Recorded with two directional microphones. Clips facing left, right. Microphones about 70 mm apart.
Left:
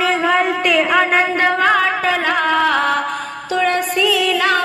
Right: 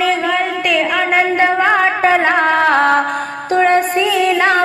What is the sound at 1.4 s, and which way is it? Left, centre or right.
Music, right.